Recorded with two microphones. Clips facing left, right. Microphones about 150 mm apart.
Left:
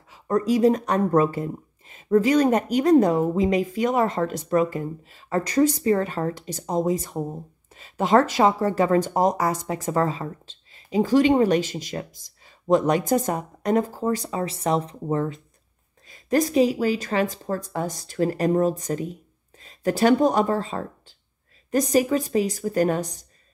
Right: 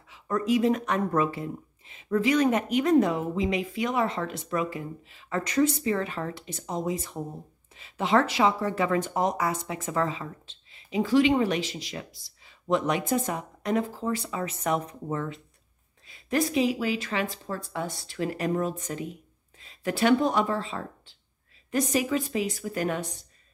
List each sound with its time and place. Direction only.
0.1 s speech: 40° left (ahead or behind)